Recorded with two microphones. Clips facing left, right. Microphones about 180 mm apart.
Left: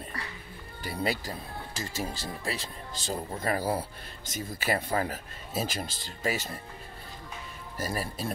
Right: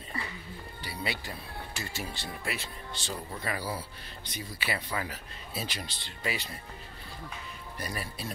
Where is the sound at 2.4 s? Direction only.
30° left (ahead or behind).